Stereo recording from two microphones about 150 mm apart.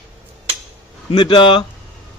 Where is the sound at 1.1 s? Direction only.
35° left (ahead or behind).